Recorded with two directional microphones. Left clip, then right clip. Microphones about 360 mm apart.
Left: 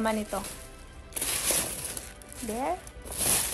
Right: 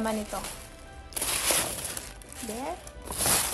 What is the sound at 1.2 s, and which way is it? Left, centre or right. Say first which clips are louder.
Music: right 3 dB; centre.